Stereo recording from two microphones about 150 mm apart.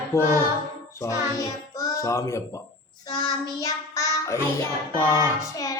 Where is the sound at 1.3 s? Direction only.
20° left (ahead or behind).